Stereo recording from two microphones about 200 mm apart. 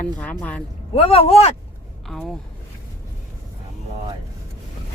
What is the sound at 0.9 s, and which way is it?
Speech, 30° left (ahead or behind).